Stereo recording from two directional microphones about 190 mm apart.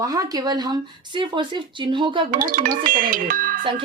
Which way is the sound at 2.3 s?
45° right (ahead or behind).